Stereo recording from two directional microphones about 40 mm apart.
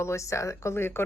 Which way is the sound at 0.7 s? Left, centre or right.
Left.